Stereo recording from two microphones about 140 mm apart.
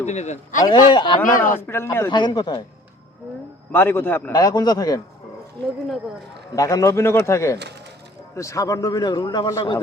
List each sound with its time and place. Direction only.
0.0 s speech: 55° left (ahead or behind)
0.6 s speech: 35° left (ahead or behind)
1.2 s a man's voice: 20° left (ahead or behind)
2.0 s speech: 35° left (ahead or behind)
3.7 s a man's voice: 15° left (ahead or behind)
4.3 s a man's voice: 30° left (ahead or behind)
6.6 s a man's voice: 25° left (ahead or behind)